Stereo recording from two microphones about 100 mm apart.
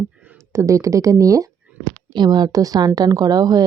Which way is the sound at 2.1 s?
45° right (ahead or behind).